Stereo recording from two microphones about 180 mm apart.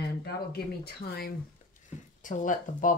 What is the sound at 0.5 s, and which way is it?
Speech, 60° left (ahead or behind).